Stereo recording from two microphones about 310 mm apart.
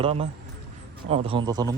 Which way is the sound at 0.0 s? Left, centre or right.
Centre.